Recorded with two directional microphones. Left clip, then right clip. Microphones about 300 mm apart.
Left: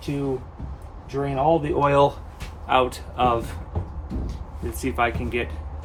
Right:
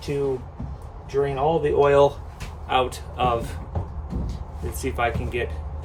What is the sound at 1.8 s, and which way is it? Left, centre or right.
Speech, left.